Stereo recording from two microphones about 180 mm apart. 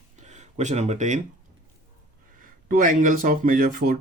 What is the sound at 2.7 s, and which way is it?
Speech, 45° right (ahead or behind).